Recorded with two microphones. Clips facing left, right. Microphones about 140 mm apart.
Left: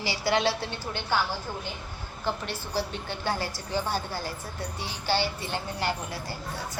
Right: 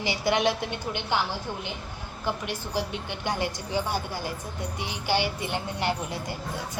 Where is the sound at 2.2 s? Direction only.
15° right (ahead or behind).